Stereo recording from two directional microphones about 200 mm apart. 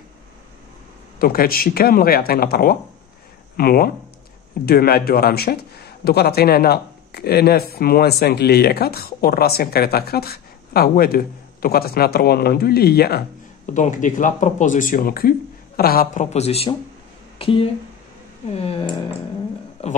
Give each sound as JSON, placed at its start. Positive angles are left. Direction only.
{"t": 1.2, "sound": "a man's voice", "side_deg": 50}
{"t": 13.7, "sound": "speech", "side_deg": 40}
{"t": 18.6, "sound": "a sound", "side_deg": 25}
{"t": 19.8, "sound": "speech", "side_deg": 30}